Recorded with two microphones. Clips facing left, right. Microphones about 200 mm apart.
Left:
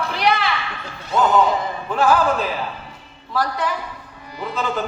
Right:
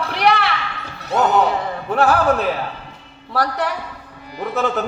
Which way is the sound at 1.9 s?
65° right (ahead or behind).